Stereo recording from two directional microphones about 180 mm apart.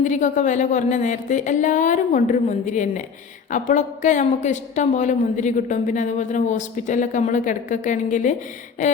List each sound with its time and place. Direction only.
0.0 s a woman's voice: 45° left (ahead or behind)